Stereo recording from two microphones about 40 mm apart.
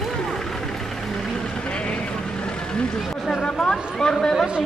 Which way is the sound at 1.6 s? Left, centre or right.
Left.